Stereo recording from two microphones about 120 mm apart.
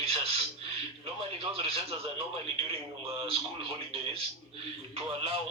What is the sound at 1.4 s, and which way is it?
Speech, 55° right (ahead or behind).